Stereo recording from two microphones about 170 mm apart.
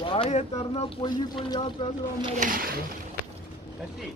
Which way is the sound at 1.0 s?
25° left (ahead or behind).